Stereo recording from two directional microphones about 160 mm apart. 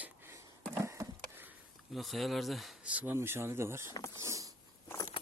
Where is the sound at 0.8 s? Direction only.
20° right (ahead or behind).